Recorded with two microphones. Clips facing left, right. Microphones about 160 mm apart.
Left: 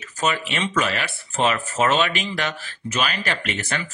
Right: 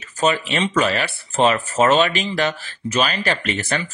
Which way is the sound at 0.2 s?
35° right (ahead or behind).